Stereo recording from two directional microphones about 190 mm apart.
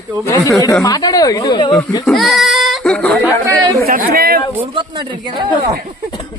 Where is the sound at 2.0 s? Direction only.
Centre (ahead or behind).